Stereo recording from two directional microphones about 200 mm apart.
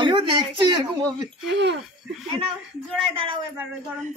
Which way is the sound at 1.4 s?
60° right (ahead or behind).